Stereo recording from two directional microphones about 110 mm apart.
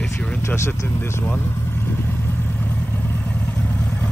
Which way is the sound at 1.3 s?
20° left (ahead or behind).